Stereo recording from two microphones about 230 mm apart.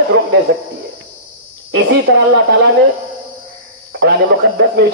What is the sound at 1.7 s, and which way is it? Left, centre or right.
Speech, right.